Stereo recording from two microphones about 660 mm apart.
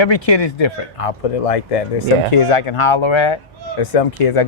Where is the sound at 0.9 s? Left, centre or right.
Left.